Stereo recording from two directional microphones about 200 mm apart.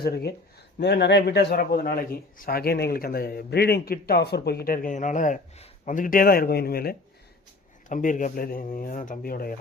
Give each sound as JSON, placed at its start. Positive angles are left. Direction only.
{"t": 0.0, "sound": "speech", "side_deg": 50}